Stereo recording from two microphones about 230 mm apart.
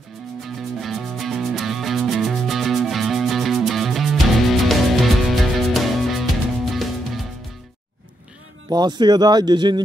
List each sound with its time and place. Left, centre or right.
0.6 s music: centre
8.6 s speech: centre